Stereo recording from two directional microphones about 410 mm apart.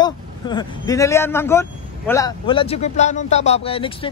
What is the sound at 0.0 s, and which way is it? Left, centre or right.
Speech, centre.